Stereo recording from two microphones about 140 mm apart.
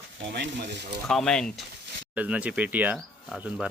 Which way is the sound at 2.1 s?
10° right (ahead or behind).